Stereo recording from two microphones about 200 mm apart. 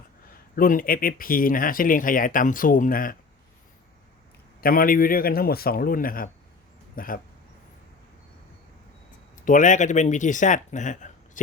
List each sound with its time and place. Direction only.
0.5 s speech: 45° left (ahead or behind)
4.6 s speech: 45° left (ahead or behind)
9.4 s speech: 40° left (ahead or behind)